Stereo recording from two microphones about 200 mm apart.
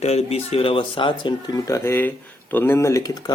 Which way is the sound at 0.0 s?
30° left (ahead or behind).